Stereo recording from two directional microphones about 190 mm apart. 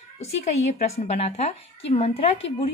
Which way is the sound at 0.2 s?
35° left (ahead or behind).